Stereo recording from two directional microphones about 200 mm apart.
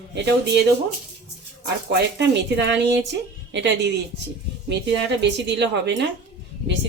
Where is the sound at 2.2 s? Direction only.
60° right (ahead or behind).